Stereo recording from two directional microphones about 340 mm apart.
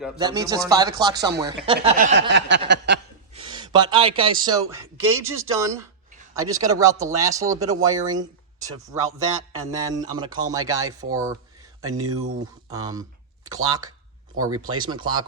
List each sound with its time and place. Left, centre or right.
0.2 s speech: centre; by 2.6 s right
2.6 s a sound: right
3.3 s a man's voice: centre